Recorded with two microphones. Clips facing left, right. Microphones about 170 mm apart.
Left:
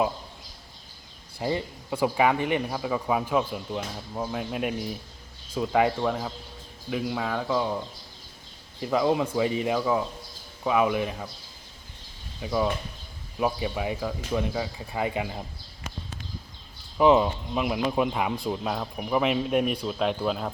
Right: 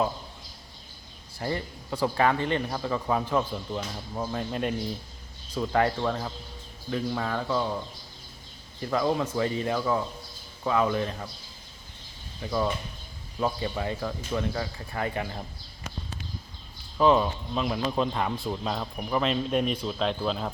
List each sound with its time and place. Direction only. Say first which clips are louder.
1.4 s speech: left 3 dB; 15° left (ahead or behind)
12.4 s speech: left 2 dB; 10° left (ahead or behind)
17.0 s speech: left 2 dB; 15° left (ahead or behind)